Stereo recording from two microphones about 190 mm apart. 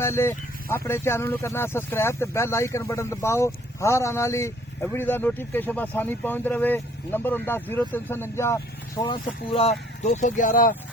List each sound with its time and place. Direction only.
0.0 s speech: 15° left (ahead or behind); by 10.8 s 45° left (ahead or behind)